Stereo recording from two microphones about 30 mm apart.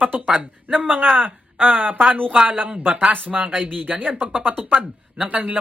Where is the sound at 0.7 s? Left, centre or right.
Right.